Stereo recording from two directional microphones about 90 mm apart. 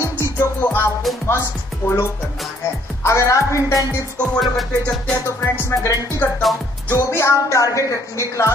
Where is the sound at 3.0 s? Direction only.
30° left (ahead or behind).